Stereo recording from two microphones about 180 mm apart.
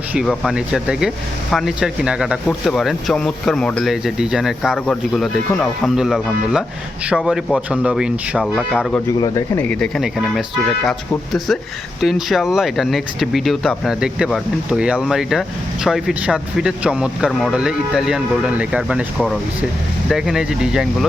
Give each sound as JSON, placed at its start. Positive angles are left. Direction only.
{"t": 0.1, "sound": "speech", "side_deg": 0}
{"t": 9.0, "sound": "speech", "side_deg": 20}
{"t": 9.6, "sound": "speech", "side_deg": 5}